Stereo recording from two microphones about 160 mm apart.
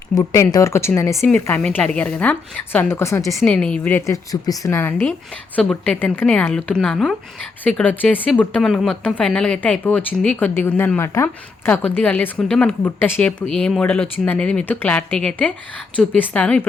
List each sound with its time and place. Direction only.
0.1 s speech: 20° left (ahead or behind)
3.4 s a woman's voice: 5° left (ahead or behind)